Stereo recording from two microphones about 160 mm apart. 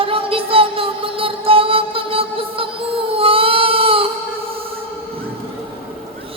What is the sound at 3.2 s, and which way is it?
Child singing, 35° right (ahead or behind).